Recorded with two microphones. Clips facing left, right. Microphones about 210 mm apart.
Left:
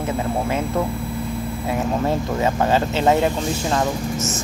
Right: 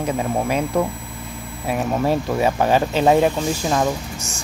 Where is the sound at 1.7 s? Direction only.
15° right (ahead or behind).